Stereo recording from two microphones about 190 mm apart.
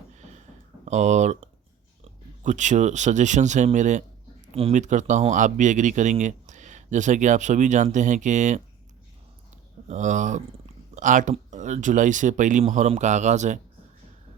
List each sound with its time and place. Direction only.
0.1 s a sound: 40° right (ahead or behind)
0.9 s speech: 40° right (ahead or behind)
2.4 s speech: 40° right (ahead or behind)
9.9 s speech: 40° right (ahead or behind)